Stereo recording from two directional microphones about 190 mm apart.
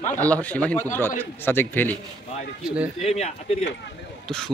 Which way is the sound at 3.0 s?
35° left (ahead or behind).